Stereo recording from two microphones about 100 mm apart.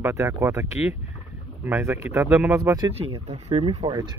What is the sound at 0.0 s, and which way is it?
Speech, 30° right (ahead or behind).